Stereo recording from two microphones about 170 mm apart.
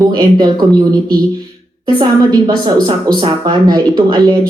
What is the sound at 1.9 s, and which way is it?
A woman's voice, 25° right (ahead or behind).